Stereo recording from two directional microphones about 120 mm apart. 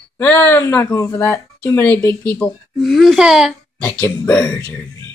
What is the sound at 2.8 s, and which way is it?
Speech, centre (ahead or behind).